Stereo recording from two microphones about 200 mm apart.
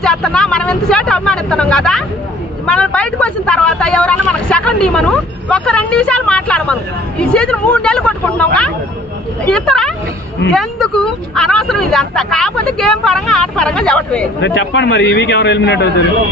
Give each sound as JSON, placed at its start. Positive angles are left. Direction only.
{"t": 0.0, "sound": "speech", "side_deg": 5}
{"t": 14.4, "sound": "a man's voice", "side_deg": 65}